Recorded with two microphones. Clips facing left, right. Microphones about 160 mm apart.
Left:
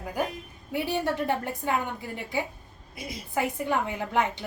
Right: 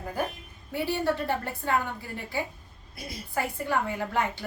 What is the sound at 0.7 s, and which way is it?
A woman's voice, 15° left (ahead or behind).